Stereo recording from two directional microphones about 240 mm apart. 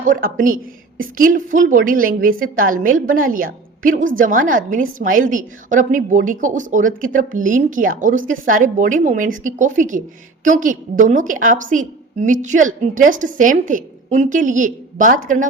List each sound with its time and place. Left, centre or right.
0.0 s a woman's voice: right